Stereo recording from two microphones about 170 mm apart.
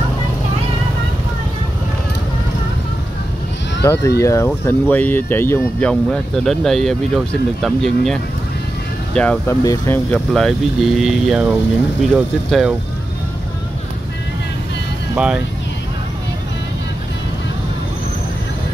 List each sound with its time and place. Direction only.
3.8 s speech: 15° left (ahead or behind)
10.3 s speech: centre (ahead or behind)
15.1 s speech: 5° right (ahead or behind)